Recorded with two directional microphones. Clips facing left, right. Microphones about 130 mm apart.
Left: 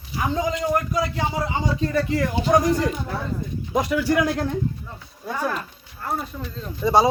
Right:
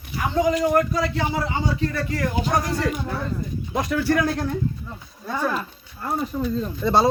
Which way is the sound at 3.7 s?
15° left (ahead or behind).